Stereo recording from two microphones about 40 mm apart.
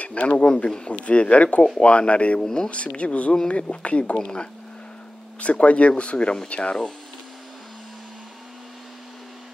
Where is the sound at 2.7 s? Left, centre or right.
Left.